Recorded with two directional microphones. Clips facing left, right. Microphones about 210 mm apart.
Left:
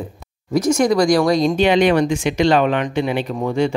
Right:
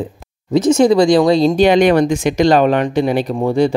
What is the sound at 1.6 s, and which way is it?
Speech, 45° right (ahead or behind).